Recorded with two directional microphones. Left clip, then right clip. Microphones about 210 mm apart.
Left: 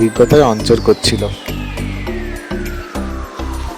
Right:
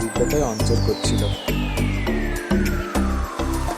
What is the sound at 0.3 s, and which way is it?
Speech, 35° left (ahead or behind).